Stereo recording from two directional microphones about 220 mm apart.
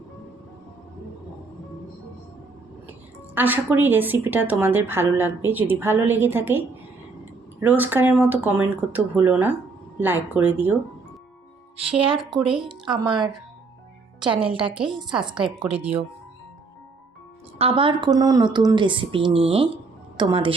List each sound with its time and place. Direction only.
3.3 s a woman's voice: 10° right (ahead or behind)
7.6 s a woman's voice: 10° right (ahead or behind)
11.8 s a woman's voice: 25° right (ahead or behind)
12.4 s speech: 5° right (ahead or behind)
13.0 s a woman's voice: 20° right (ahead or behind)
15.5 s a woman's voice: 5° right (ahead or behind)
17.6 s a woman's voice: 25° right (ahead or behind)